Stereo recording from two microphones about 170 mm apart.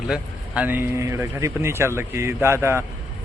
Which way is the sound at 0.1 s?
10° right (ahead or behind).